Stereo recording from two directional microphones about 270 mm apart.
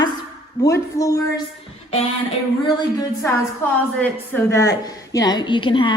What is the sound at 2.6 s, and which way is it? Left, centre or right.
Speech, centre.